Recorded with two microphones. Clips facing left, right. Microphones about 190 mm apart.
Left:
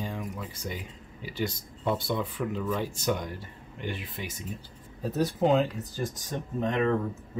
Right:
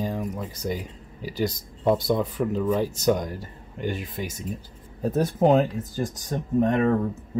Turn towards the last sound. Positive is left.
turn(degrees=-50)  # may be behind; listen again after turning